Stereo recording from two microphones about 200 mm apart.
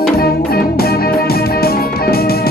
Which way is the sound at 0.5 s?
50° left (ahead or behind).